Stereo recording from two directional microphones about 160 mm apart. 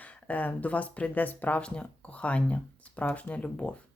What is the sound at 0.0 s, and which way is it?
Speech, 10° left (ahead or behind).